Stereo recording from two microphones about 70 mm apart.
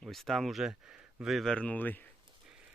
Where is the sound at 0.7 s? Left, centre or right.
Centre.